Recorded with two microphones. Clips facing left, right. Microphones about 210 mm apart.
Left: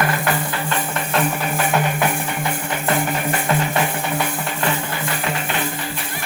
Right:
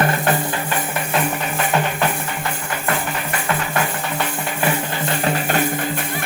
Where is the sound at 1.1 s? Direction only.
Centre (ahead or behind).